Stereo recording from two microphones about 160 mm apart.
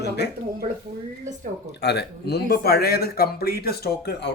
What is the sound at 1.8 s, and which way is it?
A man's voice, 90° left.